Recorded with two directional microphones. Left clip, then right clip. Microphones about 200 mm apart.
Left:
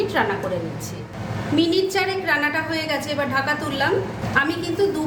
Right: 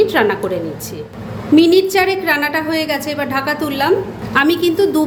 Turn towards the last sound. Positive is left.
turn(degrees=-50)  # may be behind; listen again after turning